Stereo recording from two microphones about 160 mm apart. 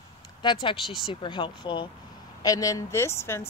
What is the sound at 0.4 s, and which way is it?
A woman's voice, 30° left (ahead or behind).